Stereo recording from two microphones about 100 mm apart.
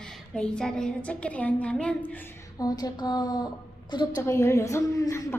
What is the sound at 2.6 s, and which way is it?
Speech, 40° left (ahead or behind).